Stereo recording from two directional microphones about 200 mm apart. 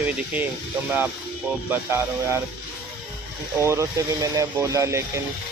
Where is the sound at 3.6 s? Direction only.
15° right (ahead or behind).